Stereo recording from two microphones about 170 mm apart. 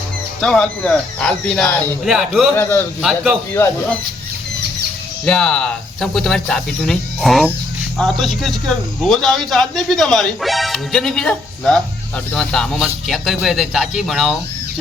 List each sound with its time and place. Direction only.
0.4 s a man's voice: 5° left (ahead or behind)
2.6 s speech: 10° left (ahead or behind)
3.0 s a man's voice: 5° right (ahead or behind)
3.5 s speech: 15° left (ahead or behind)
5.2 s a man's voice: 5° left (ahead or behind)